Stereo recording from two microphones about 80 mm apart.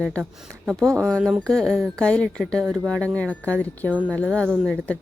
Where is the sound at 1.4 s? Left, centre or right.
Centre.